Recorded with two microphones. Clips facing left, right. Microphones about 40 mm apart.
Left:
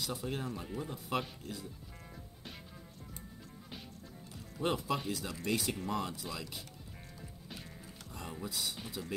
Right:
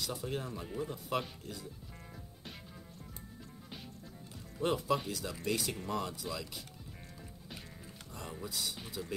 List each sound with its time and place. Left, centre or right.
0.0 s speech: centre
4.6 s speech: centre
7.2 s music: centre
8.1 s speech: centre